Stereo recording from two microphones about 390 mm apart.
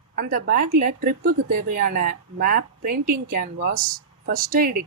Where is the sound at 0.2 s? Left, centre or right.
Right.